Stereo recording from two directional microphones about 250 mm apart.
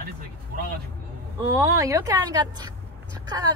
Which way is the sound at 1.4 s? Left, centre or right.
Centre.